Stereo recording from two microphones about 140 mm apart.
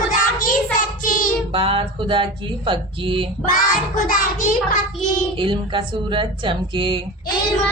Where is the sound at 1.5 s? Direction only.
40° right (ahead or behind).